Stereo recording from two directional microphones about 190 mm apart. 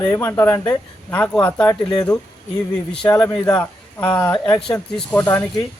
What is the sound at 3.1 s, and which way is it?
A man's voice, 15° left (ahead or behind).